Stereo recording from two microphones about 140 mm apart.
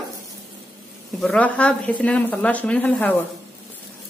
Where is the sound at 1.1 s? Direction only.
5° left (ahead or behind).